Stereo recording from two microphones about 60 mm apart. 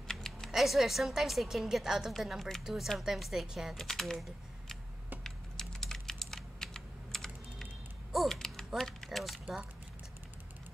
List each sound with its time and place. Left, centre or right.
0.1 s typing: centre
0.5 s a woman's voice: centre
2.6 s a woman's voice: centre
3.8 s typing: centre
8.7 s a sound: centre